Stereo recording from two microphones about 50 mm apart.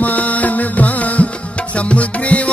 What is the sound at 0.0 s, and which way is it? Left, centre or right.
Music, left.